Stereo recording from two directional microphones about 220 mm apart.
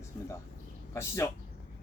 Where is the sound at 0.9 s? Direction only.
10° left (ahead or behind).